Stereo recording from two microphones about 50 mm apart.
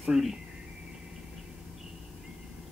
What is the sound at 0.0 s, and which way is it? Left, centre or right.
Speech, centre.